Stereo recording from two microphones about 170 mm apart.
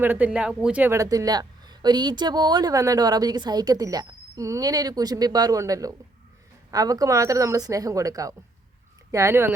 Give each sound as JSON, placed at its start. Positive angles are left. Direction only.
{"t": 0.0, "sound": "a man's voice", "side_deg": -10}